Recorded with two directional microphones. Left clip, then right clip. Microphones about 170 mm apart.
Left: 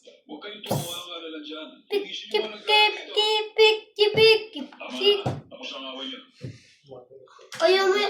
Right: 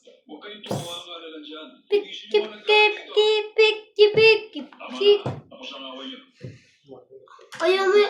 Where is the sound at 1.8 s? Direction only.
10° left (ahead or behind).